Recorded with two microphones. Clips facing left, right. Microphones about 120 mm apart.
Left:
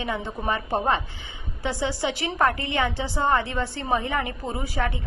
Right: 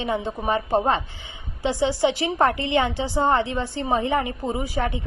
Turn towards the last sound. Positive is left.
turn(degrees=-20)  # may be behind; listen again after turning